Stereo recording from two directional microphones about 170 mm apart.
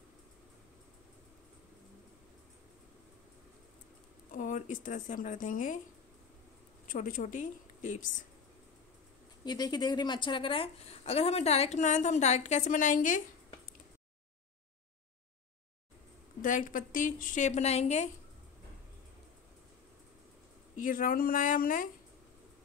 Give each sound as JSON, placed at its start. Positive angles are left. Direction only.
{"t": 4.3, "sound": "a woman's voice", "side_deg": 50}
{"t": 6.9, "sound": "a woman's voice", "side_deg": 50}
{"t": 9.4, "sound": "a woman's voice", "side_deg": 25}
{"t": 16.3, "sound": "a woman's voice", "side_deg": 50}
{"t": 20.8, "sound": "a woman's voice", "side_deg": 55}